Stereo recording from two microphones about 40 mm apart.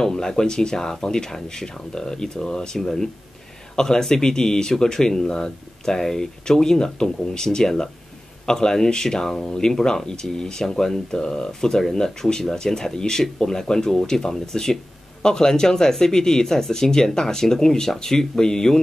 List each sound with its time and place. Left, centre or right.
0.0 s speech: centre